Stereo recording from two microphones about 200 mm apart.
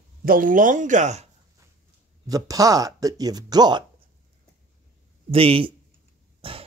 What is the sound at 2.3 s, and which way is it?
Speech, 15° right (ahead or behind).